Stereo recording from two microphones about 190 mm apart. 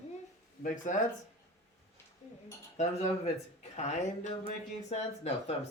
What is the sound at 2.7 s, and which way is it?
A woman's voice, 35° left (ahead or behind).